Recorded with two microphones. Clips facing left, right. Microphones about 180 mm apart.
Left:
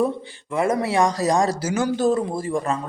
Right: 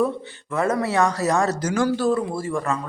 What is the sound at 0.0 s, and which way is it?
Speech, 10° left (ahead or behind).